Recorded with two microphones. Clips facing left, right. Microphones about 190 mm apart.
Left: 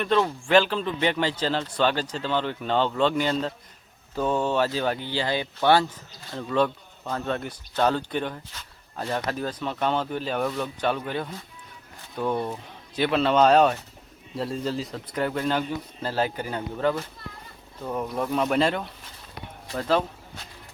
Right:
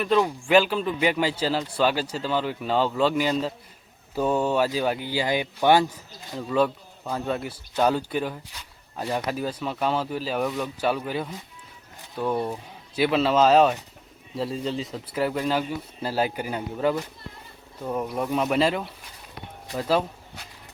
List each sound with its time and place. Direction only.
0.0 s speech: 10° right (ahead or behind)